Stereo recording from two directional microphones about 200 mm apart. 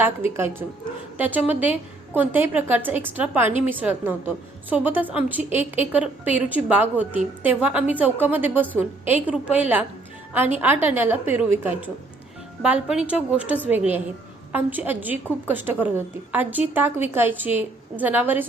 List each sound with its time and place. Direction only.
0.0 s a woman's voice: 10° right (ahead or behind)